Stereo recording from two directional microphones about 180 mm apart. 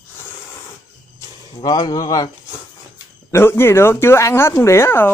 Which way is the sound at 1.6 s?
20° left (ahead or behind).